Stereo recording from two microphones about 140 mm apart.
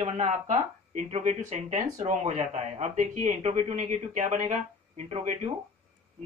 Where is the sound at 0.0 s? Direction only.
55° right (ahead or behind).